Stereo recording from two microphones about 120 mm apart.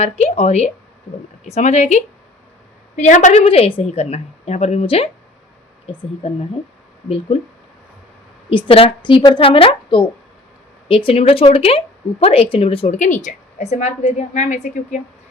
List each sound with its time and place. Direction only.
0.0 s a woman's voice: 65° left (ahead or behind)
2.9 s a woman's voice: 85° left; by 4.0 s 55° left (ahead or behind)
4.0 s a woman's voice: 65° left (ahead or behind)
8.4 s a woman's voice: 45° left (ahead or behind)
13.2 s a woman's voice: 70° left (ahead or behind)